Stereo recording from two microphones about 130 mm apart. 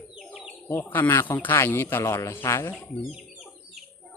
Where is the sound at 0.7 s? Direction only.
15° left (ahead or behind).